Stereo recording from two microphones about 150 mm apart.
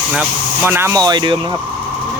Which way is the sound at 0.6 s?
15° right (ahead or behind).